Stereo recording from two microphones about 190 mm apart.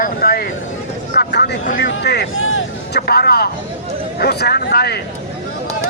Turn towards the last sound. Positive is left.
turn(degrees=55)  # may be behind; listen again after turning